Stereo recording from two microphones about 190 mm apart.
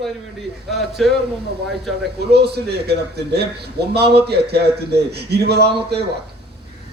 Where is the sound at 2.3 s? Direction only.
60° right (ahead or behind).